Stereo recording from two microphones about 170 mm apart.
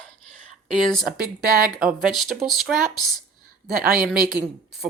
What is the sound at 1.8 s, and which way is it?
Speech, 5° right (ahead or behind).